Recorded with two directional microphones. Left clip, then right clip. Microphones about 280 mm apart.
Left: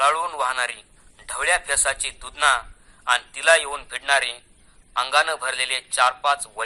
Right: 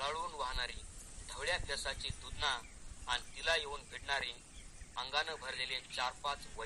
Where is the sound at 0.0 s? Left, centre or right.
Left.